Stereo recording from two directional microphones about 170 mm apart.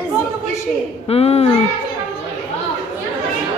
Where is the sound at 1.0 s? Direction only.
35° left (ahead or behind).